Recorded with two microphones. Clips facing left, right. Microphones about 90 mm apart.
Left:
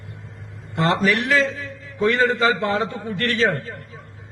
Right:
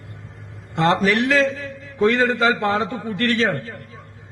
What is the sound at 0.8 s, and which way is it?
Speech, 40° right (ahead or behind).